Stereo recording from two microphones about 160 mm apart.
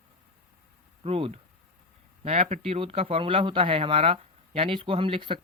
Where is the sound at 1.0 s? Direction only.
35° right (ahead or behind).